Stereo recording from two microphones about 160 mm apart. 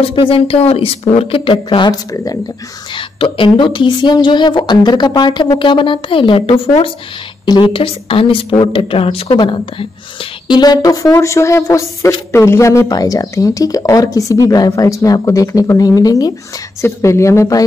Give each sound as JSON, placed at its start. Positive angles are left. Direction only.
{"t": 0.0, "sound": "a woman's voice", "side_deg": 35}